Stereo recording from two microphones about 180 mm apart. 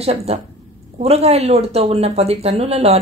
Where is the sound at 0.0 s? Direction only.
35° right (ahead or behind).